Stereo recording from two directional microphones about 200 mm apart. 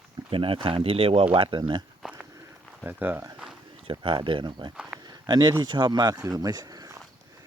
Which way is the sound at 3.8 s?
25° right (ahead or behind).